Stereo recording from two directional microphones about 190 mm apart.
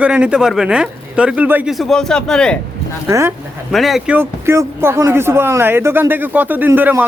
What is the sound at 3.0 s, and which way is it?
Speech, 15° right (ahead or behind).